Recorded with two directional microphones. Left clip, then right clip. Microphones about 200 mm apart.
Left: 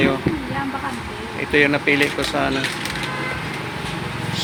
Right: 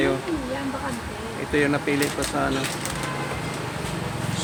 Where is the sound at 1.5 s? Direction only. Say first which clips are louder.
Left 6 dB; centre (ahead or behind).